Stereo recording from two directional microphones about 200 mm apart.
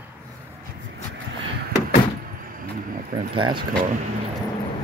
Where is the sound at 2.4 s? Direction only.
45° right (ahead or behind).